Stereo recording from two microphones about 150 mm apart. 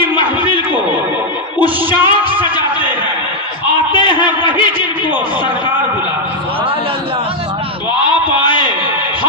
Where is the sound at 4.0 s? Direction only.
30° left (ahead or behind).